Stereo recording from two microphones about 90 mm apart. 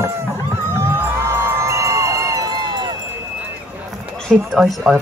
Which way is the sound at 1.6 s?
35° right (ahead or behind).